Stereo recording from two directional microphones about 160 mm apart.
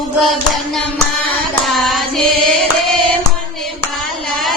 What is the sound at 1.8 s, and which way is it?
Music, centre (ahead or behind).